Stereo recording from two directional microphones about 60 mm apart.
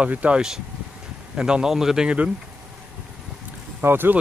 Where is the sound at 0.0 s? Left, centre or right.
Right.